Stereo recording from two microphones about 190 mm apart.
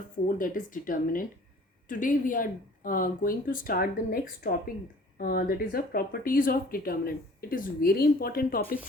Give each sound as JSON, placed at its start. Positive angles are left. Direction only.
{"t": 0.3, "sound": "speech", "side_deg": 45}